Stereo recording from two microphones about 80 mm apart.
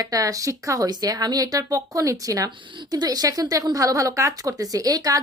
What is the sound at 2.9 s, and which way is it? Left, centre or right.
A woman's voice, right.